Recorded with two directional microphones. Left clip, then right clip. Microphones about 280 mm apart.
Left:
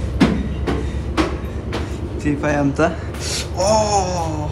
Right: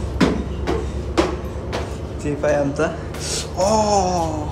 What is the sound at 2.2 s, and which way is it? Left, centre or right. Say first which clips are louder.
Speech: even; centre.